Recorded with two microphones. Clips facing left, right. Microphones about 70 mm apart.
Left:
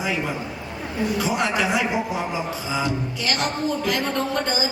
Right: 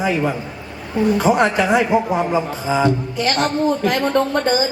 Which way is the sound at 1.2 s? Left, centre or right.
Right.